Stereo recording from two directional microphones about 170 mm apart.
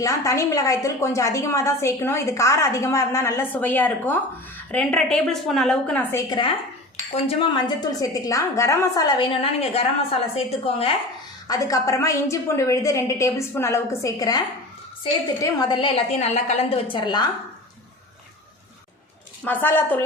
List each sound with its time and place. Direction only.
0.0 s a woman's voice: 20° left (ahead or behind)
7.3 s a woman's voice: 30° left (ahead or behind)
11.4 s a woman's voice: 20° left (ahead or behind)
19.5 s a woman's voice: 10° left (ahead or behind)